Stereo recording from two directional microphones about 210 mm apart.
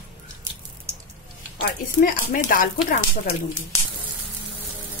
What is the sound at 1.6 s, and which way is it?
Speech, 40° left (ahead or behind).